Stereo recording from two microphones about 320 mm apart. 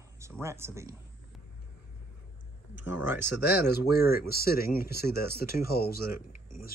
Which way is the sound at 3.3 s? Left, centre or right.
Left.